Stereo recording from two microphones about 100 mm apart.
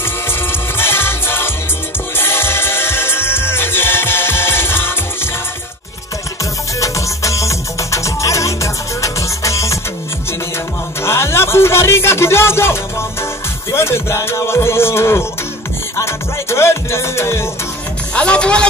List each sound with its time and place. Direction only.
0.5 s music: 25° left (ahead or behind)
6.8 s music: 30° left (ahead or behind)
11.1 s music: 25° left (ahead or behind)
18.1 s a man's voice: 10° left (ahead or behind)